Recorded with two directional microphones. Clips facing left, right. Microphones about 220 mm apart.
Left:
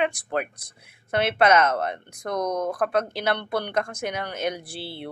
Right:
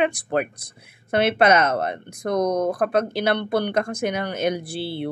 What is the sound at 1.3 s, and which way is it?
Speech, 30° right (ahead or behind).